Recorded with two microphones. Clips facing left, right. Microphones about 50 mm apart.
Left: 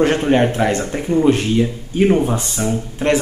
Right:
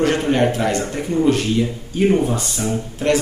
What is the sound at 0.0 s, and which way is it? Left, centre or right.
A man's voice, left.